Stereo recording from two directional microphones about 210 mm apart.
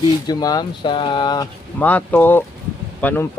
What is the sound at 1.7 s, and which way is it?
Speech, 5° left (ahead or behind).